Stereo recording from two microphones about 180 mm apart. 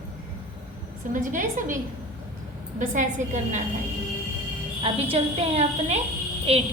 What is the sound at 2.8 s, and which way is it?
Speech, 45° right (ahead or behind).